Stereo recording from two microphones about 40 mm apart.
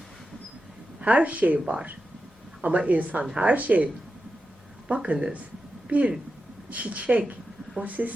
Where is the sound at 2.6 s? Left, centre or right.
Right.